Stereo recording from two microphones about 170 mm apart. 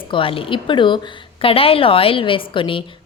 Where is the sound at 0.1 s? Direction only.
30° left (ahead or behind).